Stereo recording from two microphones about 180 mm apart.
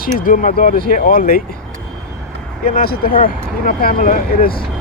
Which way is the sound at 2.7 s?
55° left (ahead or behind).